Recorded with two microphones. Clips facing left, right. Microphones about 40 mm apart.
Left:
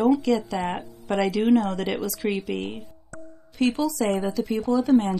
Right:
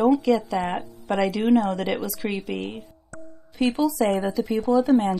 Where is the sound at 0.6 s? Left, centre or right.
Right.